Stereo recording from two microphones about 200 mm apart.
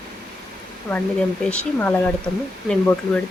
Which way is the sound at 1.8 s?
10° left (ahead or behind).